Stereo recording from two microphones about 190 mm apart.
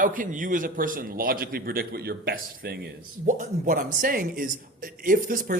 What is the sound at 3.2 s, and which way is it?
Speech, 45° right (ahead or behind).